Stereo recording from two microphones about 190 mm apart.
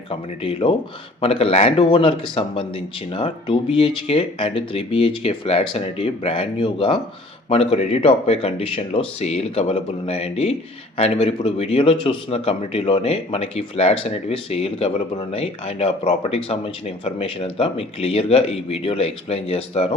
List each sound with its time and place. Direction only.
0.1 s a man's voice: 30° left (ahead or behind)